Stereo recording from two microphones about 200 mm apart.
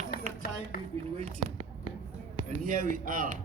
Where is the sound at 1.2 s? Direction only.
30° right (ahead or behind).